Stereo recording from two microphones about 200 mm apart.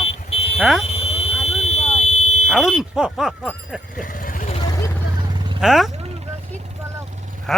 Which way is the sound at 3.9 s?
45° left (ahead or behind).